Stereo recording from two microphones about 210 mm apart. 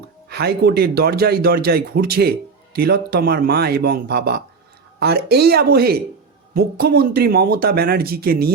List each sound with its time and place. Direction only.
0.3 s speech: 50° right (ahead or behind)